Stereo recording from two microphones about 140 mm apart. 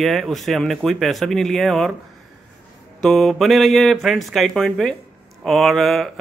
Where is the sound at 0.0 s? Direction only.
Centre (ahead or behind).